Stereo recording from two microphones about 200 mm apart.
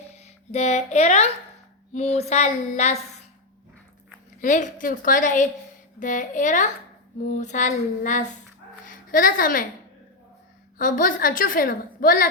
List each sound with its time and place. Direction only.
0.2 s a woman's voice: 35° left (ahead or behind)
4.4 s a woman's voice: 40° left (ahead or behind)
10.8 s a woman's voice: 40° left (ahead or behind)